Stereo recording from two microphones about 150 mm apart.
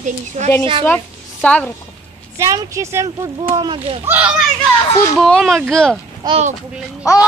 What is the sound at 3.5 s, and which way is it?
Speech, 35° right (ahead or behind).